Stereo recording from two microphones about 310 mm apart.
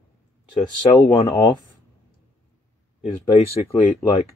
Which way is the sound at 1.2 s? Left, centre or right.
Centre.